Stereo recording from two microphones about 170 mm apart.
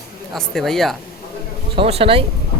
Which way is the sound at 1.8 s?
35° right (ahead or behind).